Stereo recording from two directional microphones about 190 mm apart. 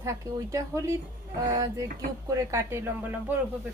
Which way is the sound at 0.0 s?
15° right (ahead or behind).